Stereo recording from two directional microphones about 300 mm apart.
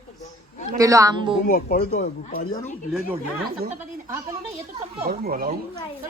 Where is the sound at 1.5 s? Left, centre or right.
Left.